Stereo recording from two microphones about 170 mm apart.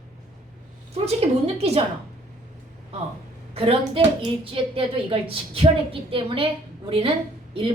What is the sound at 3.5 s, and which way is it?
A woman's voice, 35° right (ahead or behind).